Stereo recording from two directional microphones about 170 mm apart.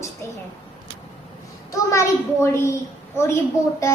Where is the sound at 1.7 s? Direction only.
15° left (ahead or behind).